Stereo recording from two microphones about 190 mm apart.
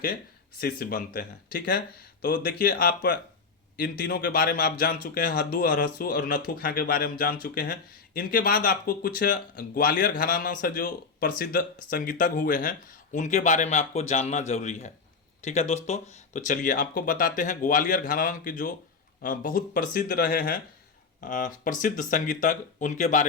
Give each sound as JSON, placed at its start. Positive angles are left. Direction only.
{"t": 0.6, "sound": "speech", "side_deg": 50}